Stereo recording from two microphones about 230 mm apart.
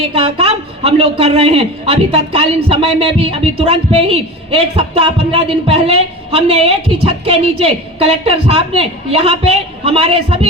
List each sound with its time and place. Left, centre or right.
0.0 s a man's voice: right